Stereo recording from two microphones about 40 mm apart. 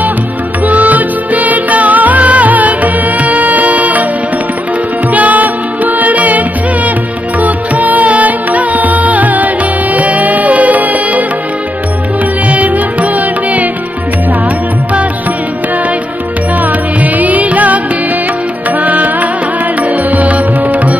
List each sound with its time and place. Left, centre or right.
0.7 s music: right
5.1 s music: right
12.4 s music: right
17.0 s music: right
18.8 s music: right